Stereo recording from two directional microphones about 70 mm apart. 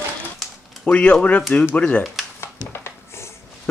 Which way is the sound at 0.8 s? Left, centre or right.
Centre.